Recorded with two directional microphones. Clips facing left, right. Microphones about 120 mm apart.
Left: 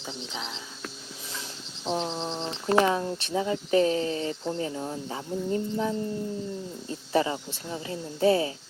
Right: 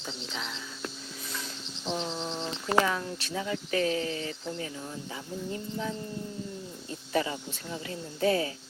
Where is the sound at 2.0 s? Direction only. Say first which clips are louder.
Left 3 dB; 25° left (ahead or behind).